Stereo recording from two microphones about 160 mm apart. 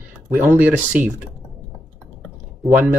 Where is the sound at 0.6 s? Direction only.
10° right (ahead or behind).